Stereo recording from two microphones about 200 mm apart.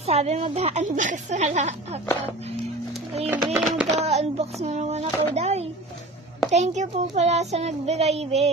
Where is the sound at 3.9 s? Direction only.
30° right (ahead or behind).